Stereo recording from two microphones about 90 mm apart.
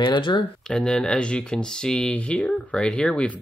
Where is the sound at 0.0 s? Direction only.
60° left (ahead or behind).